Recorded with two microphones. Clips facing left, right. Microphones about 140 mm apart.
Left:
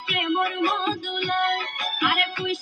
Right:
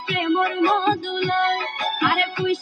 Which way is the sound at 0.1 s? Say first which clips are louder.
Right 4 dB; 30° right (ahead or behind).